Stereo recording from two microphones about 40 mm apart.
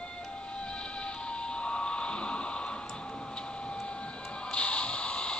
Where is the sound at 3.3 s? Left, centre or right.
Left.